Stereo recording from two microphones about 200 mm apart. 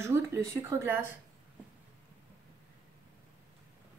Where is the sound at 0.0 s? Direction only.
15° right (ahead or behind).